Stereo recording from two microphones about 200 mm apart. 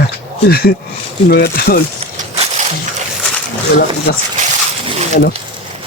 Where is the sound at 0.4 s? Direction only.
50° left (ahead or behind).